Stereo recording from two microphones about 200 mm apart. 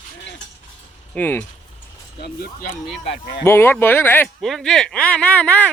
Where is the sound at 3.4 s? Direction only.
10° left (ahead or behind).